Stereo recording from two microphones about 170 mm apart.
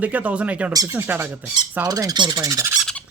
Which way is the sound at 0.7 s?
20° right (ahead or behind).